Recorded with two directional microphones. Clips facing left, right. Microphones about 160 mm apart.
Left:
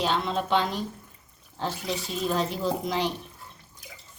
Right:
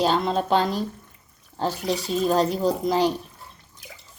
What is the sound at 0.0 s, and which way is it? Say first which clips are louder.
Speech: right 5 dB; 40° right (ahead or behind).